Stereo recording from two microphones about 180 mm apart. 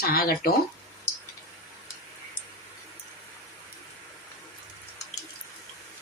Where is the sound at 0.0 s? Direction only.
55° left (ahead or behind).